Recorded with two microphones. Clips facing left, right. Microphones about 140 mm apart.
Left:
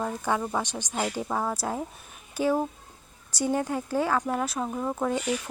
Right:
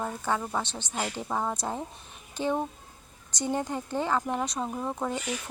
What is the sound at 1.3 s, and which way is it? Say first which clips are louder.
Speech: left 2 dB; centre (ahead or behind).